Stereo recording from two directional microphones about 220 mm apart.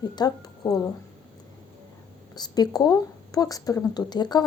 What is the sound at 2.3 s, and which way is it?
A woman's voice, 20° left (ahead or behind).